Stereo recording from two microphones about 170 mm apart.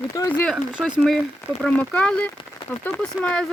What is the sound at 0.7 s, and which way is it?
Speech, centre (ahead or behind).